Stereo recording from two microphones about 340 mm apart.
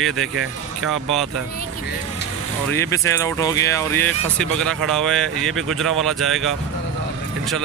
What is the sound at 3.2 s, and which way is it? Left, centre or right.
Speech, centre.